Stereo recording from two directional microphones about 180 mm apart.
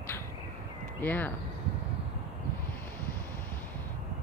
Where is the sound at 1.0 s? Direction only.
10° left (ahead or behind).